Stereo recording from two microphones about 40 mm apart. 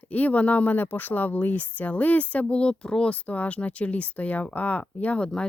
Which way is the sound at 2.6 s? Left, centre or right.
Centre.